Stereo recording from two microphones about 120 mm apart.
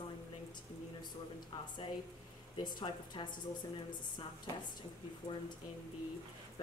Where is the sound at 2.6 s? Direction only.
35° left (ahead or behind).